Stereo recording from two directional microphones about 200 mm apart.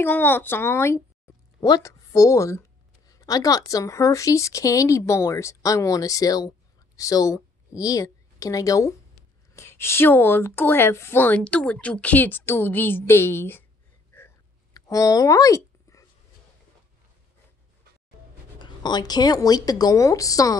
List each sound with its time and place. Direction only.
0.0 s a woman's voice: 10° left (ahead or behind)
14.1 s a sound: 15° left (ahead or behind)
18.6 s a woman's voice: 20° left (ahead or behind)